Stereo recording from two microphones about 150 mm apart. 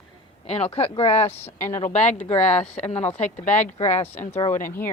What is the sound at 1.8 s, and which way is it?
Speech, 50° left (ahead or behind).